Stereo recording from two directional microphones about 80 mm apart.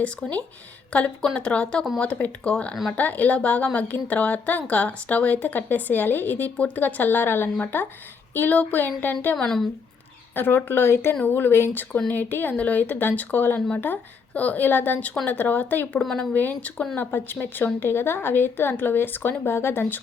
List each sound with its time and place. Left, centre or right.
0.0 s speech: centre
9.3 s speech: centre
10.3 s speech: left